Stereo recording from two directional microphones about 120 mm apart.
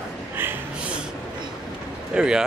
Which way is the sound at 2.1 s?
5° right (ahead or behind).